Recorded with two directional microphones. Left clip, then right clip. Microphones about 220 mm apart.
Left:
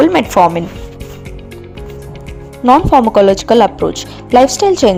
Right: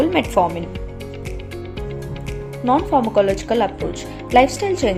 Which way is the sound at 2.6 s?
30° left (ahead or behind).